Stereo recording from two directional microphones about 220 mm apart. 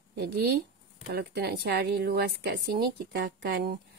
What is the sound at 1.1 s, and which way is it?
A woman's voice, 50° right (ahead or behind).